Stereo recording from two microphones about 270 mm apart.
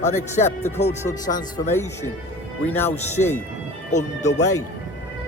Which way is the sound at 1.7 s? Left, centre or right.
Centre.